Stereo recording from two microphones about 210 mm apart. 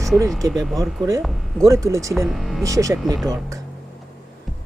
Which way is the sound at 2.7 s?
15° right (ahead or behind).